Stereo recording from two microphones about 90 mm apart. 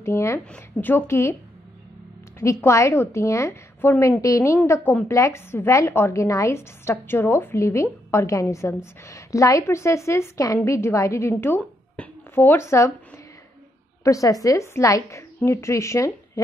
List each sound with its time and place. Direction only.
0.0 s a woman's voice: 30° left (ahead or behind)
0.5 s a woman's voice: 15° left (ahead or behind)
2.3 s a woman's voice: 35° left (ahead or behind)
12.0 s a sound: 25° left (ahead or behind)
14.0 s a woman's voice: 40° left (ahead or behind)